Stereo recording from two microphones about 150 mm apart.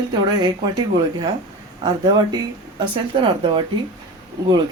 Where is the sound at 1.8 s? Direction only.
30° right (ahead or behind).